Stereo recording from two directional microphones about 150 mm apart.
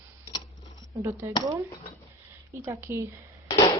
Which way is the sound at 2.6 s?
15° right (ahead or behind).